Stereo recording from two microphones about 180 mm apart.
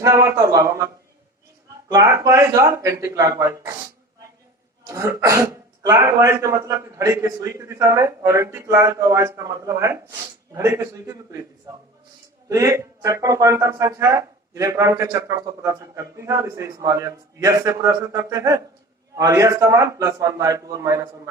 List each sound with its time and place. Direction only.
0.0 s speech: 20° right (ahead or behind)
1.9 s speech: 15° right (ahead or behind)
4.8 s a man's voice: 15° right (ahead or behind)